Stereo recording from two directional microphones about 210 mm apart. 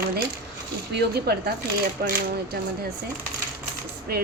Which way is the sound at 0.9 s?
50° right (ahead or behind).